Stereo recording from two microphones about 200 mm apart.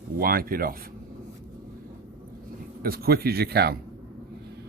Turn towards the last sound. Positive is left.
turn(degrees=-50)  # may be behind; listen again after turning